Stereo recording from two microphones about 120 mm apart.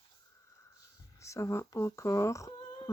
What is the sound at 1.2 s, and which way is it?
Speech, 25° left (ahead or behind).